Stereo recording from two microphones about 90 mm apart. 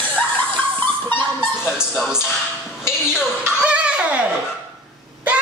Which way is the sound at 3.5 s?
15° right (ahead or behind).